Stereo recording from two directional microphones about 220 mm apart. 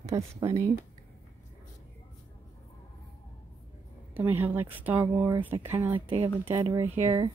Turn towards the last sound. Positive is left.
turn(degrees=-15)  # may be behind; listen again after turning